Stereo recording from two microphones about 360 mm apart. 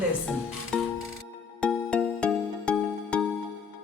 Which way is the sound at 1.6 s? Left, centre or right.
Centre.